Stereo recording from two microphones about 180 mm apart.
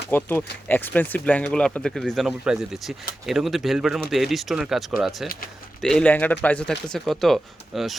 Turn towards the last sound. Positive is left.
turn(degrees=0)  # may be behind; listen again after turning